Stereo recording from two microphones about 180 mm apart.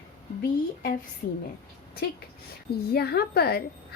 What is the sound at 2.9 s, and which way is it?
Speech, 60° left (ahead or behind).